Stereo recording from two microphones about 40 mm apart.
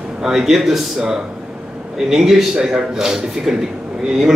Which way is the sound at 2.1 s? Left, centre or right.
Centre.